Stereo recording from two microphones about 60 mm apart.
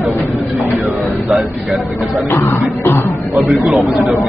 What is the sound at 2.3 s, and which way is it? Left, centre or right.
Cough, left.